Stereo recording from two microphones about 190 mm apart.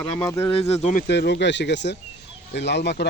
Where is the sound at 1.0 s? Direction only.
60° left (ahead or behind).